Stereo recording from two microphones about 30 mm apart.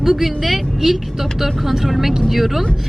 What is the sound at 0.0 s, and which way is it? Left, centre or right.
A woman's voice, centre.